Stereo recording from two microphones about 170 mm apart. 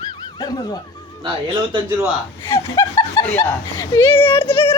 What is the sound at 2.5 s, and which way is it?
Speech, 15° left (ahead or behind).